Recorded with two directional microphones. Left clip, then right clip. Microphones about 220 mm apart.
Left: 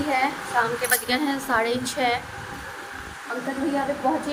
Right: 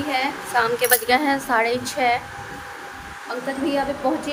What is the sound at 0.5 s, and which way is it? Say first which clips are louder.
Speech: right 3 dB; 50° right (ahead or behind).